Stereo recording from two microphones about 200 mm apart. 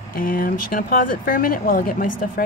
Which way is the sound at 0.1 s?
45° left (ahead or behind).